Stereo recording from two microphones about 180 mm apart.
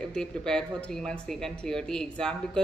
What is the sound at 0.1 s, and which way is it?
A woman's voice, 5° left (ahead or behind).